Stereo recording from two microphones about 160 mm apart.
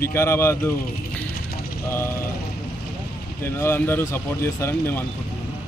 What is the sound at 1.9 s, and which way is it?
Speech, 15° left (ahead or behind).